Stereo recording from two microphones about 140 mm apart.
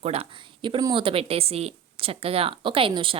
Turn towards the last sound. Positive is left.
turn(degrees=-40)  # may be behind; listen again after turning